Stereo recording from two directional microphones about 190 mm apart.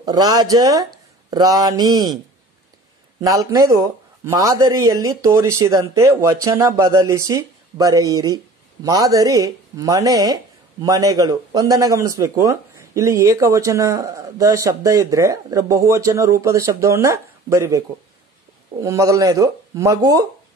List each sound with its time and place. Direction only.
0.0 s speech: 20° right (ahead or behind)
3.2 s speech: 15° right (ahead or behind)